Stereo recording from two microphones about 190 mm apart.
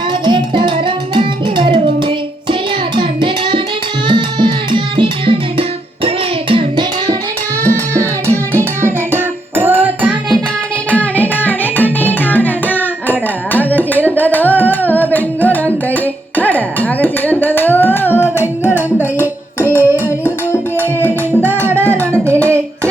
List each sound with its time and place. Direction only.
0.1 s music: 25° right (ahead or behind)
7.6 s music: 15° right (ahead or behind)
10.9 s music: 10° left (ahead or behind)
19.5 s a sound: 10° left (ahead or behind)
20.1 s music: 10° left (ahead or behind)